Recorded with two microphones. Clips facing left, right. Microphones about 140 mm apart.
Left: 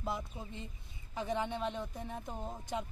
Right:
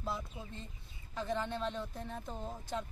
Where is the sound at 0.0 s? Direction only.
20° left (ahead or behind).